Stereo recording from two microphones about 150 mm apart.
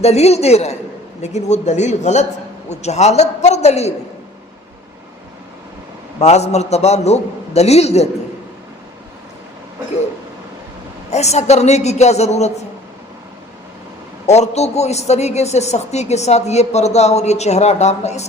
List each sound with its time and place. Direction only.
0.0 s a man's voice: 45° left (ahead or behind)
6.1 s a man's voice: 45° left (ahead or behind)
11.1 s a man's voice: 45° left (ahead or behind)
14.3 s a man's voice: 45° left (ahead or behind)